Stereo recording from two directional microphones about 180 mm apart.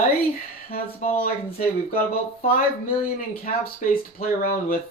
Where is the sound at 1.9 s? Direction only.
50° left (ahead or behind).